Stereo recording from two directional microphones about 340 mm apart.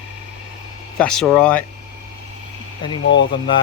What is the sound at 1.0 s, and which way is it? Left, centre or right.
Speech, centre.